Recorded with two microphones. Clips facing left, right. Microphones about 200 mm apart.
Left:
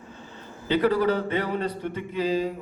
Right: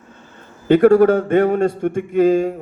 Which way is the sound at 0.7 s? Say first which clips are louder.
Right 11 dB; 50° right (ahead or behind).